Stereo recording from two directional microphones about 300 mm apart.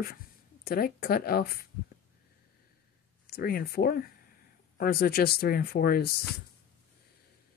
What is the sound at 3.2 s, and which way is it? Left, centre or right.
Speech, left.